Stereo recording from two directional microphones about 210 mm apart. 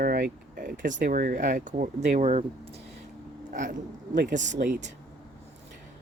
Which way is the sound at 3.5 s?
40° right (ahead or behind).